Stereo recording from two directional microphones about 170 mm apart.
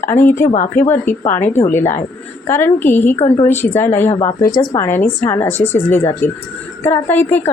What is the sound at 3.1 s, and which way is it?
Speech, 35° left (ahead or behind).